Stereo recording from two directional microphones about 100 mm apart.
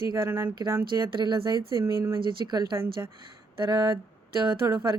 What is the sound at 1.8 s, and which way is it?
Speech, 25° right (ahead or behind).